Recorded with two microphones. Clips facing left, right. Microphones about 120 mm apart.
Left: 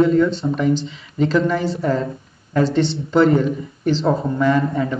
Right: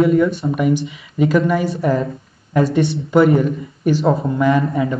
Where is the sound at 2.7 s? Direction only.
25° left (ahead or behind).